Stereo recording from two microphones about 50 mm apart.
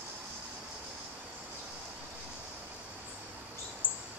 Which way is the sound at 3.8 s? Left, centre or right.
Left.